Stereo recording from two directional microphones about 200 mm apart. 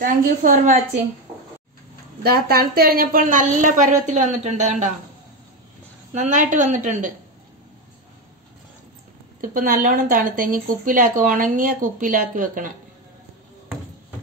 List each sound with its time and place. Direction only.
0.0 s a woman's voice: 45° right (ahead or behind)
2.2 s a woman's voice: 50° right (ahead or behind)
6.1 s a woman's voice: 40° right (ahead or behind)
9.4 s a woman's voice: 45° right (ahead or behind)